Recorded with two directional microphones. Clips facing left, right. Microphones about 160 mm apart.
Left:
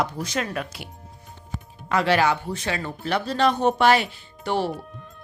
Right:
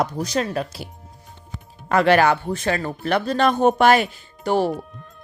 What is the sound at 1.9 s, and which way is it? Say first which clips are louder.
Speech: right 4 dB; 55° right (ahead or behind).